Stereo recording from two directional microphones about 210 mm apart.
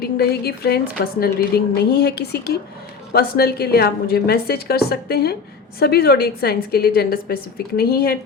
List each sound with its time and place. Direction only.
0.0 s a woman's voice: 50° left (ahead or behind)